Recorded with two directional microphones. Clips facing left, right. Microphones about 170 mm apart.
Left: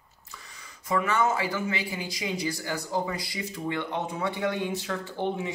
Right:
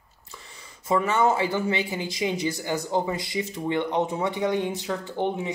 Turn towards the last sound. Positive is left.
turn(degrees=-20)  # may be behind; listen again after turning